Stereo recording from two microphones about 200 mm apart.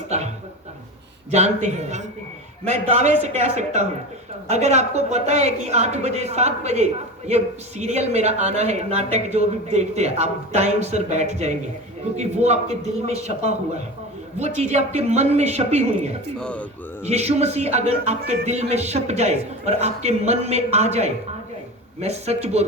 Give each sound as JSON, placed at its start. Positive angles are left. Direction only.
{"t": 0.1, "sound": "a sound", "side_deg": -35}
{"t": 1.3, "sound": "a man's voice", "side_deg": -35}
{"t": 16.4, "sound": "speech", "side_deg": 5}
{"t": 17.0, "sound": "a man's voice", "side_deg": -35}